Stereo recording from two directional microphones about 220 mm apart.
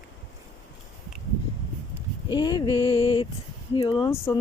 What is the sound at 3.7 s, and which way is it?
Speech, 20° left (ahead or behind).